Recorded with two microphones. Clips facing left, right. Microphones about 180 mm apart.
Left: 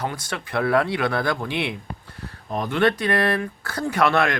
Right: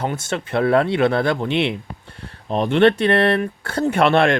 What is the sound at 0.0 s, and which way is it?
Speech, 25° right (ahead or behind).